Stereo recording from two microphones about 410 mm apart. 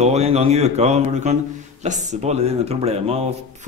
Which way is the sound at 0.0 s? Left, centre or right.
Centre.